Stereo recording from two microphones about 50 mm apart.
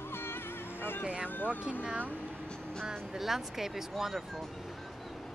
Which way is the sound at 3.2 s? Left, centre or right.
Centre.